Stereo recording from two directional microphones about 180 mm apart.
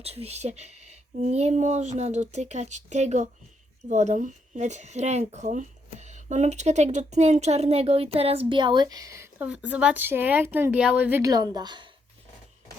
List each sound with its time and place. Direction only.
0.0 s speech: 35° right (ahead or behind)